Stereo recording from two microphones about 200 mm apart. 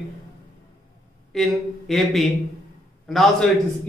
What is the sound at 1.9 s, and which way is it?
Speech, centre (ahead or behind).